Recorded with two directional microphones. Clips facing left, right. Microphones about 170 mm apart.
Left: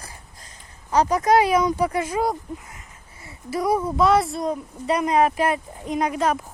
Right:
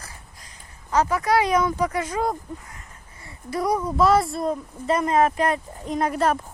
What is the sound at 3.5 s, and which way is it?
Speech, 5° left (ahead or behind).